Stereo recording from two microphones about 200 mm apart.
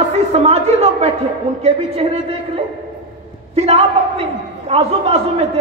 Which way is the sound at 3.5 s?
30° right (ahead or behind).